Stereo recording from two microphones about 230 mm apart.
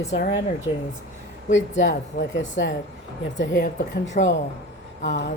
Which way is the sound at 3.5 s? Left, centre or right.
Left.